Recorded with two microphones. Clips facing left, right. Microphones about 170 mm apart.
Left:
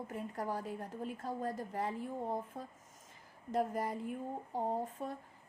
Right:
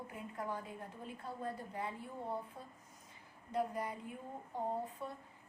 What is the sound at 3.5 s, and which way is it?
Speech, 40° left (ahead or behind).